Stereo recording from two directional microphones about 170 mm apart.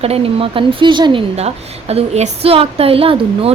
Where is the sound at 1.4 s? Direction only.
40° right (ahead or behind).